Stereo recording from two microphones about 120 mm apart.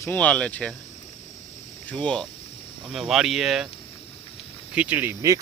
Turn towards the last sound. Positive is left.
turn(degrees=-20)  # may be behind; listen again after turning